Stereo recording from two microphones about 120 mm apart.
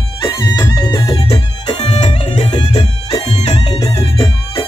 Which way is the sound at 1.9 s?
65° left (ahead or behind).